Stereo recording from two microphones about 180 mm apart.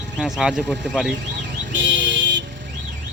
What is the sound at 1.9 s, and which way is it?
Vehicle, 90° right.